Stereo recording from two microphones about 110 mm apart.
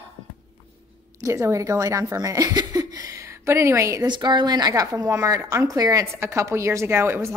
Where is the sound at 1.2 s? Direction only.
30° right (ahead or behind).